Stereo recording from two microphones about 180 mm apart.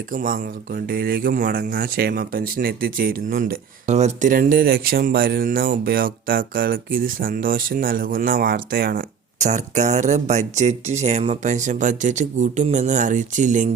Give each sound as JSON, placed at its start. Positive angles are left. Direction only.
{"t": 0.1, "sound": "speech", "side_deg": -50}